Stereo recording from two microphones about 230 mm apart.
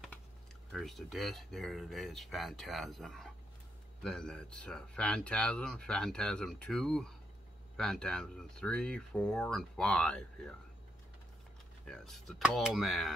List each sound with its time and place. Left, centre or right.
0.7 s speech: centre
11.8 s speech: centre